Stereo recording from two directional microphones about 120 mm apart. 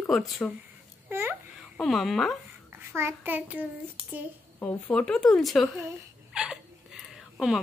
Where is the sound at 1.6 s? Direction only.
Centre (ahead or behind).